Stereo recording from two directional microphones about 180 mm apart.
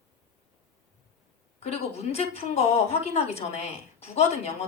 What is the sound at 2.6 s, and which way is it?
A woman's voice, 35° left (ahead or behind).